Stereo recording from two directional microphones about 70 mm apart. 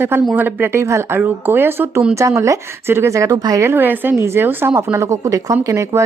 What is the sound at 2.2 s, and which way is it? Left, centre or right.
Speech, right.